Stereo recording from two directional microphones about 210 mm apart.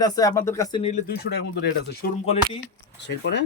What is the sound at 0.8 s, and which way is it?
Speech, 35° left (ahead or behind).